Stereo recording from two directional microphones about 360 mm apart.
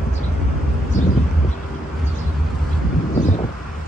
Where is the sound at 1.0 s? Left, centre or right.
Left.